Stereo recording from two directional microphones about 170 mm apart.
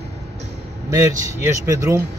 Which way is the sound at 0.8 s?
15° right (ahead or behind).